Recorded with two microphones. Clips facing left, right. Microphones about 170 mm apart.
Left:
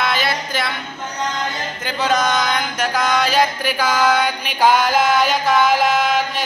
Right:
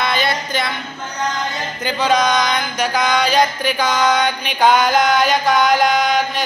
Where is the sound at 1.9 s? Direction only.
Centre (ahead or behind).